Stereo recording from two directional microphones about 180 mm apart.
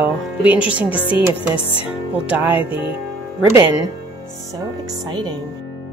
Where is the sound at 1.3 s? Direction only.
30° left (ahead or behind).